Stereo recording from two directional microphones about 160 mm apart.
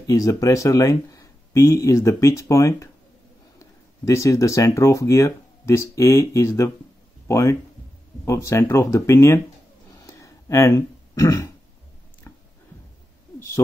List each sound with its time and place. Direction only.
0.0 s speech: 20° left (ahead or behind)
10.0 s throat clearing: 20° left (ahead or behind)